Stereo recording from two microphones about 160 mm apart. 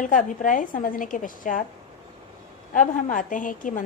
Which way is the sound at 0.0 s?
55° left (ahead or behind).